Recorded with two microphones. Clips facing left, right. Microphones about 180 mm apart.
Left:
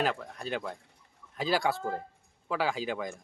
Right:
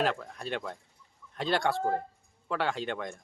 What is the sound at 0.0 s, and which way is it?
Speech, centre (ahead or behind).